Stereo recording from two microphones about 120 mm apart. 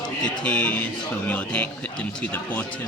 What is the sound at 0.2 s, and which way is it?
Speech, 5° left (ahead or behind).